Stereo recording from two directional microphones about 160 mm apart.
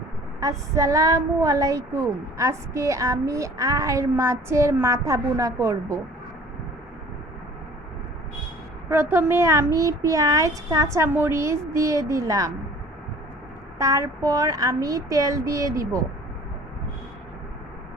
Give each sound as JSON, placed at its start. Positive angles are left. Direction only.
{"t": 0.3, "sound": "a woman's voice", "side_deg": -20}
{"t": 8.9, "sound": "a woman's voice", "side_deg": -15}
{"t": 13.7, "sound": "a woman's voice", "side_deg": -20}